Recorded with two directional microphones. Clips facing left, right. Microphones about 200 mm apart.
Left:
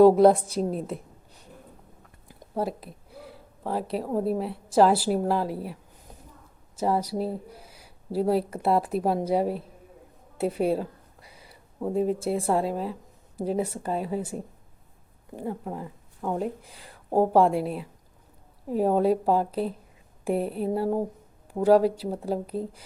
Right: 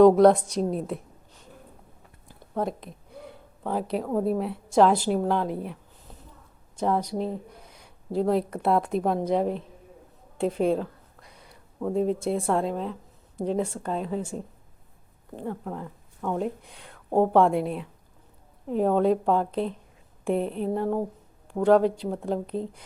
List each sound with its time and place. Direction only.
0.0 s speech: 5° left (ahead or behind)
2.2 s a sound: 15° left (ahead or behind)
2.6 s speech: 5° left (ahead or behind)